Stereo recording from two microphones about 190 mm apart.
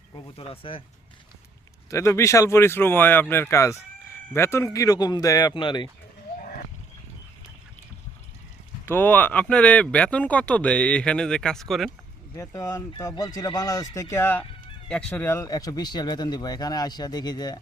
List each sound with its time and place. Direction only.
0.3 s speech: 30° left (ahead or behind)
1.9 s speech: 15° left (ahead or behind)
8.9 s speech: 10° left (ahead or behind)
12.4 s speech: 15° left (ahead or behind)